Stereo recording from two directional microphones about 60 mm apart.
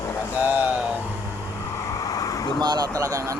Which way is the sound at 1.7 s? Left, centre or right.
Left.